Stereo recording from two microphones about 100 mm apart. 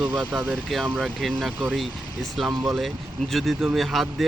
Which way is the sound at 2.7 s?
Centre (ahead or behind).